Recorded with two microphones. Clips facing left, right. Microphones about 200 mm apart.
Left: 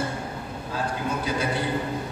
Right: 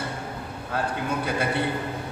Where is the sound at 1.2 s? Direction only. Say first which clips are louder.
Even; 60° right (ahead or behind).